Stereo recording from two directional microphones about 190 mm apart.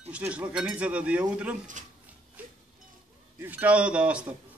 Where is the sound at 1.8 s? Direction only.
40° right (ahead or behind).